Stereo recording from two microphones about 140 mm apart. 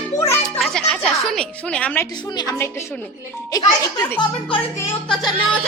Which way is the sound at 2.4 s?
20° left (ahead or behind).